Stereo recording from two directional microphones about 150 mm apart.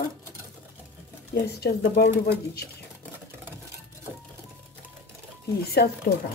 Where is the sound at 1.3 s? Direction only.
90° left.